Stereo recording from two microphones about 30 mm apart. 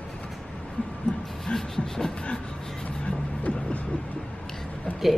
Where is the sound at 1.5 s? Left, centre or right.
Centre.